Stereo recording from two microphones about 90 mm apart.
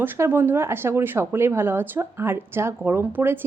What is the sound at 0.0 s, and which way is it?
Speech, 25° right (ahead or behind).